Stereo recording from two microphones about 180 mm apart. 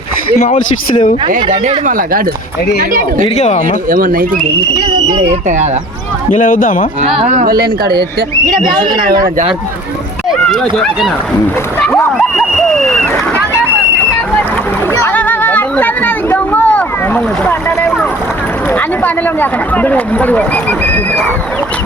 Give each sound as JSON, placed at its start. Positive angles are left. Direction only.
{"t": 0.3, "sound": "speech", "side_deg": 45}
{"t": 1.3, "sound": "speech", "side_deg": -45}
{"t": 3.3, "sound": "speech", "side_deg": 40}
{"t": 3.8, "sound": "speech", "side_deg": -50}
{"t": 5.1, "sound": "speech", "side_deg": -40}
{"t": 6.3, "sound": "speech", "side_deg": 45}
{"t": 7.2, "sound": "speech", "side_deg": -40}
{"t": 7.4, "sound": "speech", "side_deg": -60}
{"t": 10.2, "sound": "speech", "side_deg": 0}
{"t": 12.1, "sound": "speech", "side_deg": 0}
{"t": 15.0, "sound": "a sound", "side_deg": 10}
{"t": 18.7, "sound": "speech", "side_deg": 10}